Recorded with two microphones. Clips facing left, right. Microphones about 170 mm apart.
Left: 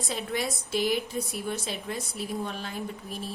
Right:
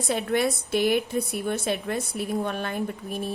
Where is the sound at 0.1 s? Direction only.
60° right (ahead or behind).